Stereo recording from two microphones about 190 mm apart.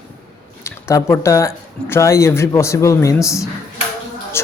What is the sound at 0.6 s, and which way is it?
Speech, 15° left (ahead or behind).